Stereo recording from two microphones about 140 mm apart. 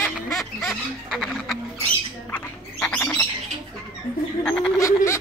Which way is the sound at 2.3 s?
10° left (ahead or behind).